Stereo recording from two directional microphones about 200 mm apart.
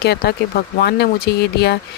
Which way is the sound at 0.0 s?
55° left (ahead or behind).